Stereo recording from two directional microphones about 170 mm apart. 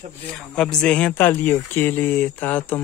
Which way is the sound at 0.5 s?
5° left (ahead or behind).